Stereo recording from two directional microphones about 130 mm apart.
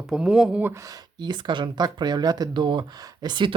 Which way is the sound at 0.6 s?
25° right (ahead or behind).